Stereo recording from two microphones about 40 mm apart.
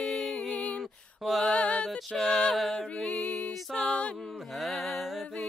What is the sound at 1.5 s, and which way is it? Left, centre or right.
Music, left.